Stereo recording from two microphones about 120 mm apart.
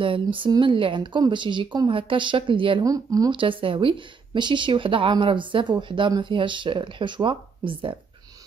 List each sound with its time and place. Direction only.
0.0 s speech: 45° right (ahead or behind)
2.8 s speech: 30° right (ahead or behind)
3.3 s speech: 45° right (ahead or behind)